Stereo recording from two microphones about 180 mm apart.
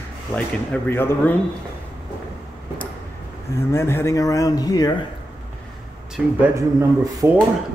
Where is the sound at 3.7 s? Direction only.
15° left (ahead or behind).